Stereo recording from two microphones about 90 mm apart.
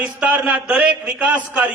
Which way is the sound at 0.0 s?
15° right (ahead or behind).